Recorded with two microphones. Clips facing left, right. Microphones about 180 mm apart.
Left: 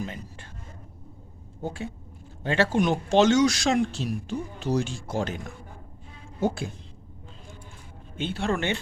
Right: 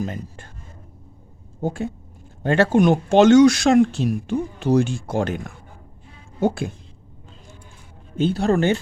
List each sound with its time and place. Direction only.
0.0 s speech: 45° right (ahead or behind)
1.6 s speech: 45° right (ahead or behind)
6.4 s speech: 55° right (ahead or behind)
8.1 s speech: 40° right (ahead or behind)